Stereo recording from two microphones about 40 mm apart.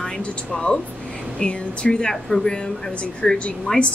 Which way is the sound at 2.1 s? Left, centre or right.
Centre.